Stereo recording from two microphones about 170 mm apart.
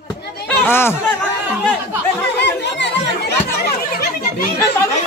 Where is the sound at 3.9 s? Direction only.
65° left (ahead or behind).